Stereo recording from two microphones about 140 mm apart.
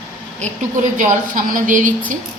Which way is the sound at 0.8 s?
65° right (ahead or behind).